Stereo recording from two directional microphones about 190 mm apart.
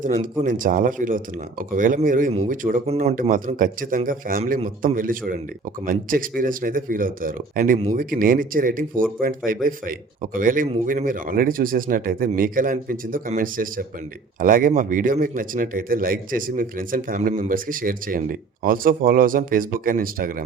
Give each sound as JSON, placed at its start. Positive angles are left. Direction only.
{"t": 0.4, "sound": "a man's voice", "side_deg": -45}
{"t": 2.9, "sound": "a man's voice", "side_deg": -35}